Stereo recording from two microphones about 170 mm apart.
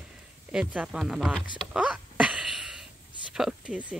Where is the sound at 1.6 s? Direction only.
5° right (ahead or behind).